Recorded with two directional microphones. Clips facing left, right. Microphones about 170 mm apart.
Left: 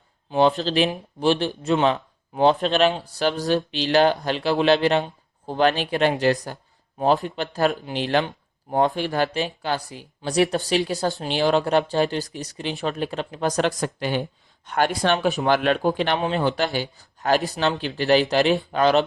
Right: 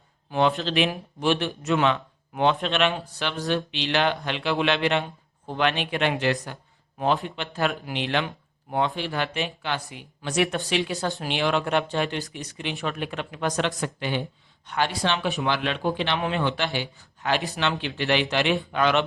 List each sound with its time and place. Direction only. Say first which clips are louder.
0.3 s a man's voice: left 4 dB; 30° left (ahead or behind)